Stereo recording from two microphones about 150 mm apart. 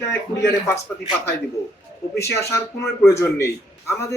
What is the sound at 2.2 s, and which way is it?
Speech, 20° left (ahead or behind).